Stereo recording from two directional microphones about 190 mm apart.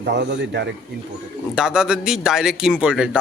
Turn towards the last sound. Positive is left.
turn(degrees=-5)  # may be behind; listen again after turning